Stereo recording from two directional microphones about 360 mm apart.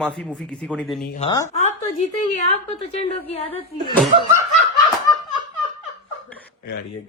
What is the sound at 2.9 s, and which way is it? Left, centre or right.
Speech, centre.